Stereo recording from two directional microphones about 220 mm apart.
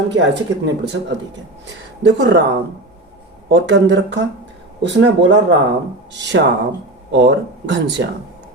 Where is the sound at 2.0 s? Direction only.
55° right (ahead or behind).